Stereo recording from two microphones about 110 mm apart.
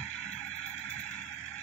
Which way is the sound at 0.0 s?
80° left.